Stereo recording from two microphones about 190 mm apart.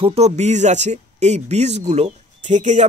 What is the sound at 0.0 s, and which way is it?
Speech, 30° right (ahead or behind).